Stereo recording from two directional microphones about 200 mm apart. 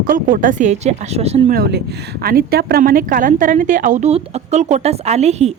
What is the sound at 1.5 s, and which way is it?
A woman's voice, 55° right (ahead or behind).